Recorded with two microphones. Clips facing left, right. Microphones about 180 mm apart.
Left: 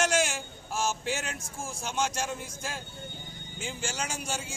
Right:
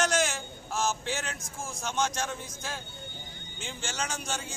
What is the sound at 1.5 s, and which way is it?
Speech, 30° left (ahead or behind).